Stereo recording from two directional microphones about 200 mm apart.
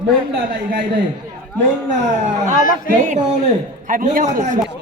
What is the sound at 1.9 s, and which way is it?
A man's voice, 35° right (ahead or behind).